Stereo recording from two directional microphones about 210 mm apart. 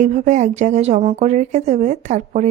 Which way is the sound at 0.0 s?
35° right (ahead or behind).